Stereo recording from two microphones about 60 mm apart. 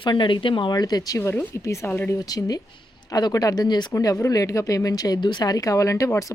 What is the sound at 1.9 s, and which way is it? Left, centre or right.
Speech, left.